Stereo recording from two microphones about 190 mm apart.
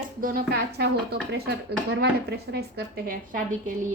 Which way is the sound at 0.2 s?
50° right (ahead or behind).